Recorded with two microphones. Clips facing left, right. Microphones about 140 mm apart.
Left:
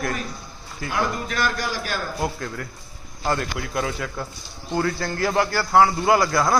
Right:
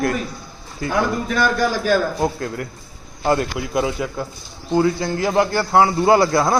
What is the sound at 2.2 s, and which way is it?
Speech, 30° right (ahead or behind).